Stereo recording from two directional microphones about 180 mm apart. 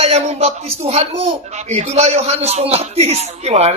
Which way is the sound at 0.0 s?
35° right (ahead or behind).